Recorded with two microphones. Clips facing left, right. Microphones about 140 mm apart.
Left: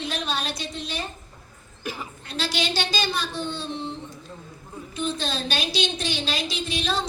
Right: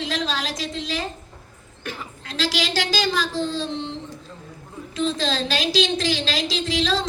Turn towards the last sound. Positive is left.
turn(degrees=-90)